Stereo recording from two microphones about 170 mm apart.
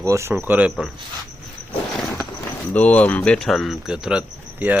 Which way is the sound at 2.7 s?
10° left (ahead or behind).